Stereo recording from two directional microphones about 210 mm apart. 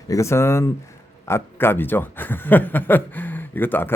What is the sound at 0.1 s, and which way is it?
Speech, 15° left (ahead or behind).